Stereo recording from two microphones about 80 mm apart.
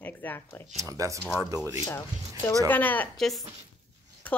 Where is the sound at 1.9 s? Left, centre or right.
Left.